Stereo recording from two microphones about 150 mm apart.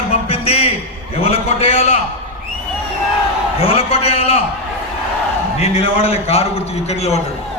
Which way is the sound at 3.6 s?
40° left (ahead or behind).